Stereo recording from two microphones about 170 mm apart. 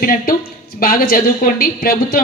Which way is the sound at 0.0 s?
55° left (ahead or behind).